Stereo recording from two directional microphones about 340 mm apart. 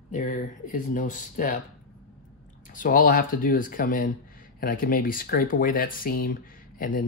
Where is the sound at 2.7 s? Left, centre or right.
Left.